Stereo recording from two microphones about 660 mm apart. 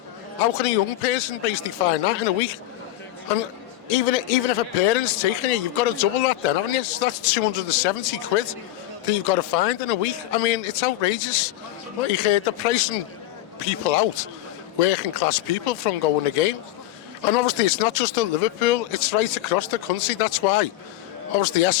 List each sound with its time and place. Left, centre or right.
0.4 s a man's voice: left
3.8 s a man's voice: left